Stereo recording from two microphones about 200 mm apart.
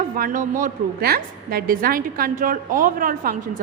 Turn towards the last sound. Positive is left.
turn(degrees=-45)  # may be behind; listen again after turning